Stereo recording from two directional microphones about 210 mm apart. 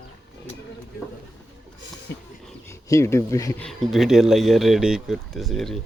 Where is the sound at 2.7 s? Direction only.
15° left (ahead or behind).